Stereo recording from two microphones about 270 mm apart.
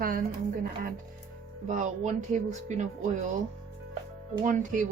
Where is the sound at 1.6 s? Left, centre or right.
Right.